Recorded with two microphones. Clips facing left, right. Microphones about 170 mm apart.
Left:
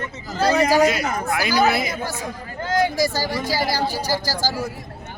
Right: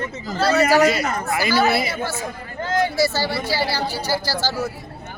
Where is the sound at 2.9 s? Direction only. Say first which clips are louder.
Right 1 dB; 15° left (ahead or behind).